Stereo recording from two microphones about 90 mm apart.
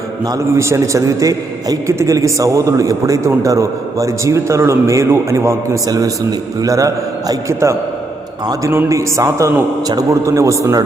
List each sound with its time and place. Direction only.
0.5 s a man's voice: 30° right (ahead or behind)
8.9 s a man's voice: 35° right (ahead or behind)